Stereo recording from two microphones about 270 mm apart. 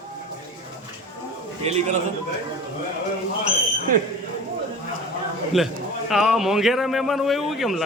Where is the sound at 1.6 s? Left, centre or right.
Right.